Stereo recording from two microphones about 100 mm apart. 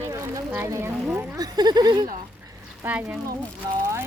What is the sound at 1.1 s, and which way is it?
Speech, 40° right (ahead or behind).